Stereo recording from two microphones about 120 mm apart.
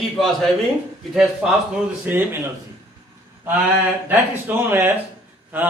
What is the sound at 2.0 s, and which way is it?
Speech, 15° right (ahead or behind).